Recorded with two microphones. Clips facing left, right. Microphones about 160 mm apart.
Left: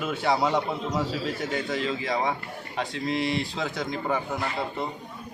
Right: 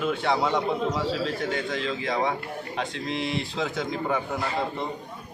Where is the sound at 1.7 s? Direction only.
5° left (ahead or behind).